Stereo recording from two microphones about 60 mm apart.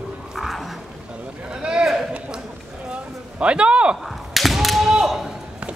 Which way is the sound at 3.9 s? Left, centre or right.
Centre.